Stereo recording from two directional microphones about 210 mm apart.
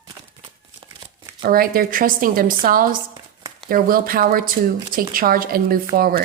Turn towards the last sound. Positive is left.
turn(degrees=-45)  # may be behind; listen again after turning